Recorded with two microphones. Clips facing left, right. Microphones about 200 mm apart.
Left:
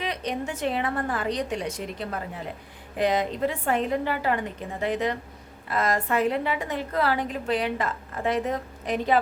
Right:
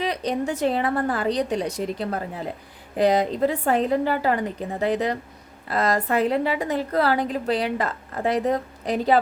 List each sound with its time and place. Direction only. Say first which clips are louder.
0.0 s a woman's voice: right 5 dB; 35° right (ahead or behind)